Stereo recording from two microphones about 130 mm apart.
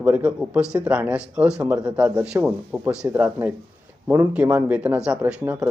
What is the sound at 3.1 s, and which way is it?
Speech, 15° right (ahead or behind).